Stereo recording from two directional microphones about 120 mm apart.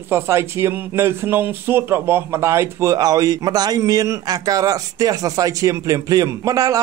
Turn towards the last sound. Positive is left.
turn(degrees=-30)  # may be behind; listen again after turning